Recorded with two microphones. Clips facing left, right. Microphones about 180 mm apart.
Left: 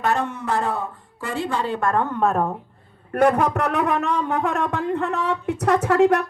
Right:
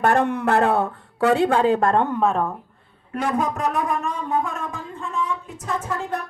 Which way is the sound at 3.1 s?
60° left (ahead or behind).